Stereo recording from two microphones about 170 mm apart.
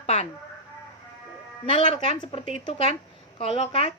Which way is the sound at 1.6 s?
30° left (ahead or behind).